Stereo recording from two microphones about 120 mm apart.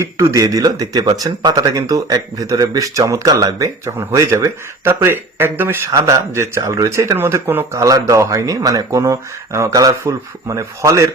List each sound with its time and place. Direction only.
0.0 s speech: 25° right (ahead or behind)